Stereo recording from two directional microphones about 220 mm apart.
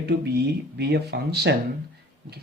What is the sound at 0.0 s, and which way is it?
Speech, 50° right (ahead or behind).